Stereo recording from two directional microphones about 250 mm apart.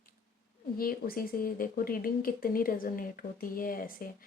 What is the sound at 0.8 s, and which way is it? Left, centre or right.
A woman's voice, left.